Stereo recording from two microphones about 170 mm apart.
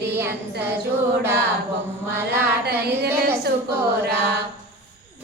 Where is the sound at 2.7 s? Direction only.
70° right (ahead or behind).